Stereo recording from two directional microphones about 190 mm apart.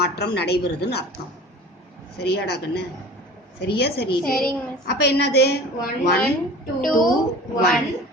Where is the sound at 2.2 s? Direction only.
60° left (ahead or behind).